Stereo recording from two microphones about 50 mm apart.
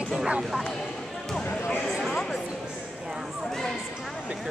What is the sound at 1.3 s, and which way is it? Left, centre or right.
Basketball bounce, centre.